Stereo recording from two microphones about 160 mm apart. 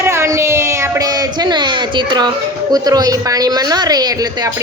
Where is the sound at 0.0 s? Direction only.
15° right (ahead or behind).